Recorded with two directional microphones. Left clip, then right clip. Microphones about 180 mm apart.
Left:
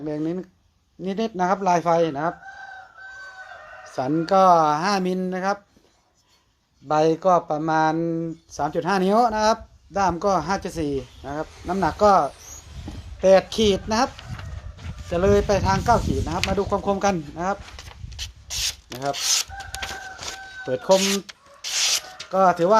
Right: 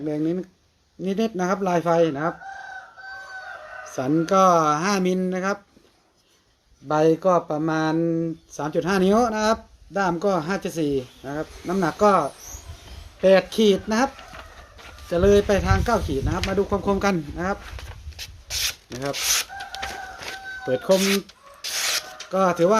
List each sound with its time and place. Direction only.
0.0 s speech: 20° right (ahead or behind)
3.8 s speech: 20° right (ahead or behind)
6.8 s speech: 20° right (ahead or behind)
15.1 s speech: 20° right (ahead or behind)
18.2 s rub: centre (ahead or behind)
19.1 s speech: centre (ahead or behind)
19.8 s a sound: centre (ahead or behind)
20.7 s speech: 20° right (ahead or behind)
20.9 s speech: centre (ahead or behind)
21.6 s rub: 5° right (ahead or behind)
22.3 s speech: 20° right (ahead or behind)